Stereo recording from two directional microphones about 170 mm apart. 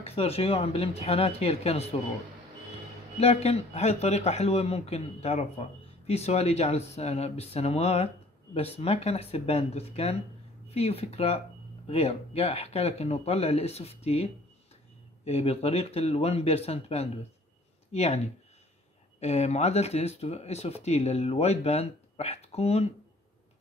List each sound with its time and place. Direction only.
0.0 s speech: 35° left (ahead or behind)
3.2 s speech: 35° left (ahead or behind)